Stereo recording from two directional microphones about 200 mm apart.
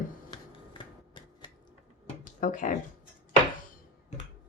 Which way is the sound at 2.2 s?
40° left (ahead or behind).